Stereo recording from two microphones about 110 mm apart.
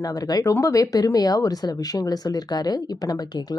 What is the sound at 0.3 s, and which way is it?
Speech, 30° left (ahead or behind).